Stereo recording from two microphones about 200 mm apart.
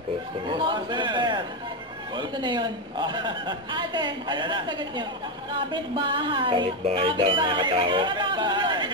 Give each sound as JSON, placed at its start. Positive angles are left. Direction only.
{"t": 0.5, "sound": "speech", "side_deg": -25}